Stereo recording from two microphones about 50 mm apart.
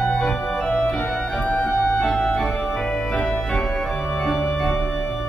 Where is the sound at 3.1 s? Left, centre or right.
Centre.